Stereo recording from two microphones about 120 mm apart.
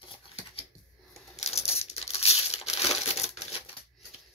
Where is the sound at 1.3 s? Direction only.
60° left (ahead or behind).